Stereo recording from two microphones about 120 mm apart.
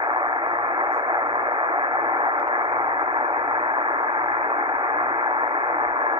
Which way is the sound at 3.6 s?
50° right (ahead or behind).